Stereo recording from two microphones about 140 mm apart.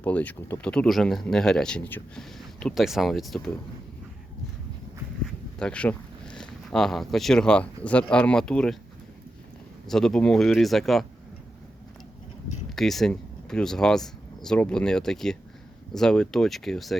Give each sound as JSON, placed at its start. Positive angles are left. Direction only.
{"t": 0.0, "sound": "speech", "side_deg": 10}
{"t": 5.2, "sound": "speech", "side_deg": 5}
{"t": 9.8, "sound": "speech", "side_deg": 5}
{"t": 12.7, "sound": "speech", "side_deg": 0}